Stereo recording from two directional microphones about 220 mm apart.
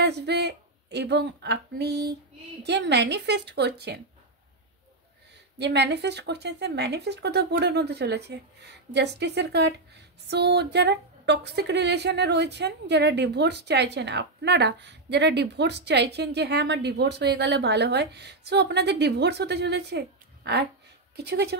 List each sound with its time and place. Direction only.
0.0 s a woman's voice: 50° right (ahead or behind)
5.6 s a woman's voice: 50° right (ahead or behind)